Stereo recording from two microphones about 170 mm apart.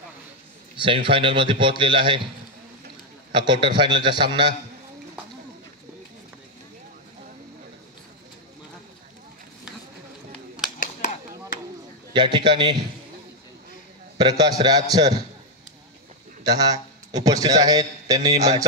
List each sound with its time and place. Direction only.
0.8 s a man's voice: 30° right (ahead or behind)
3.3 s a man's voice: 30° right (ahead or behind)
12.1 s a man's voice: 30° right (ahead or behind)
14.1 s a man's voice: 25° right (ahead or behind)
16.4 s a man's voice: 20° right (ahead or behind)